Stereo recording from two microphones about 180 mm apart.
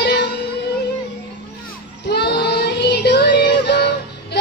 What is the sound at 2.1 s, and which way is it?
Child singing, 65° left (ahead or behind).